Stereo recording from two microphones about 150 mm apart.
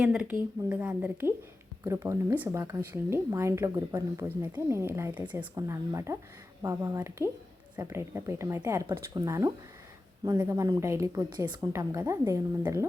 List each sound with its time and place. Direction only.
0.0 s speech: 10° right (ahead or behind)
5.5 s speech: 20° right (ahead or behind)
10.5 s speech: 20° right (ahead or behind)